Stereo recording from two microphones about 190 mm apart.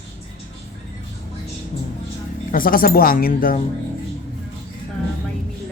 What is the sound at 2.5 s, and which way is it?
Speech, 50° left (ahead or behind).